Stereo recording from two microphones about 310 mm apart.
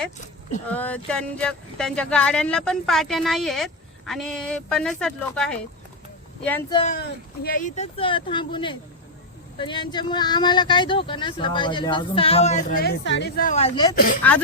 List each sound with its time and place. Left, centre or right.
0.7 s speech: centre
6.9 s speech: left
13.9 s speech: left